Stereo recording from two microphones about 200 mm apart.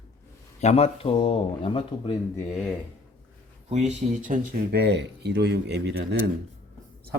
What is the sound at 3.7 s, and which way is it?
A woman's voice, 35° right (ahead or behind).